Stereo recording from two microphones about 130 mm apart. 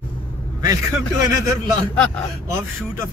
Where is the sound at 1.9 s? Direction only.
10° left (ahead or behind).